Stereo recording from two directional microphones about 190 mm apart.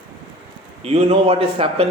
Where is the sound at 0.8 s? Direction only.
35° right (ahead or behind).